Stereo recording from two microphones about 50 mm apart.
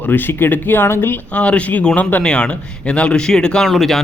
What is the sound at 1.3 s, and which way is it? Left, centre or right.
Speech, left.